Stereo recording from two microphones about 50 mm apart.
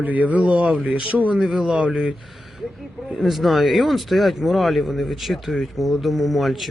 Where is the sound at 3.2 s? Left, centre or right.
Centre.